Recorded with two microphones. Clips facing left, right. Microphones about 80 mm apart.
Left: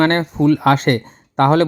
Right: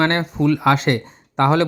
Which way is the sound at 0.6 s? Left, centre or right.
Left.